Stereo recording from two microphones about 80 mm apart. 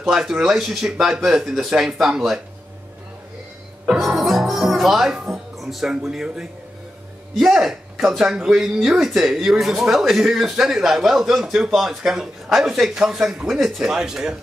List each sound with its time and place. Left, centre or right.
0.0 s speech: centre
3.8 s speech: centre